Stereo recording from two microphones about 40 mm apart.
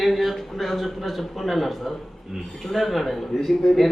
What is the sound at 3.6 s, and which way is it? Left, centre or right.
Speech, centre.